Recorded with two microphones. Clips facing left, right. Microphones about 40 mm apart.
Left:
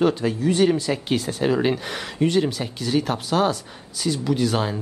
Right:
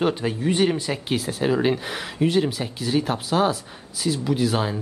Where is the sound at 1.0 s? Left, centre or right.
Centre.